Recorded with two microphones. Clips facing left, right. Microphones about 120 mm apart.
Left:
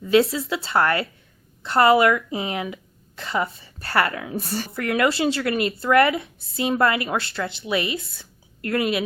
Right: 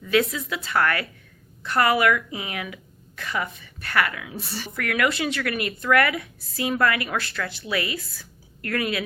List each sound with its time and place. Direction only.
0.0 s speech: 30° left (ahead or behind); by 4.7 s 45° left (ahead or behind)
4.7 s speech: 30° left (ahead or behind)